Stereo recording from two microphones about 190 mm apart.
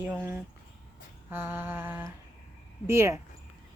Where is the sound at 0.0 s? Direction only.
10° right (ahead or behind).